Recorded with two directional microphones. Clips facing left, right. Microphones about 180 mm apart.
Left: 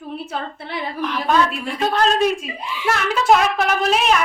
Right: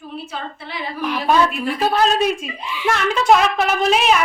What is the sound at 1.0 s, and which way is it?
A woman's voice, 10° right (ahead or behind).